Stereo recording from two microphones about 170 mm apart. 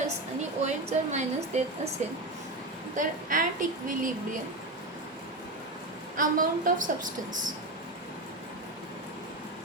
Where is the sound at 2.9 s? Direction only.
50° right (ahead or behind).